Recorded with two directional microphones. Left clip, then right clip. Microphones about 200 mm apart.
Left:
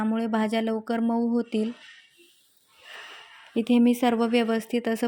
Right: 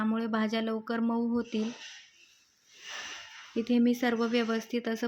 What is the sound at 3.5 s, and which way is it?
Speech, 30° left (ahead or behind).